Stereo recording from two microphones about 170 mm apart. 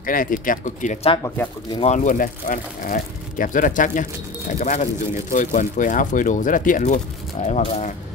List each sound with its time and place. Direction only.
0.0 s speech: 55° left (ahead or behind)
1.2 s speech: 10° left (ahead or behind)
1.9 s speech: 50° left (ahead or behind)